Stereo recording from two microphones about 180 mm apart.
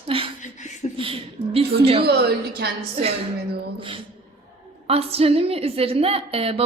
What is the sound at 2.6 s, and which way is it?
Speech, 65° right (ahead or behind).